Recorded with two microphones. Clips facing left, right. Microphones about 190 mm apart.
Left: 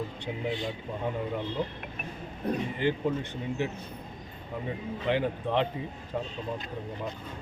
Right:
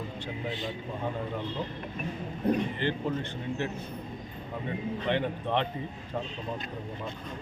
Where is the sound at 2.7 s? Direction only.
10° left (ahead or behind).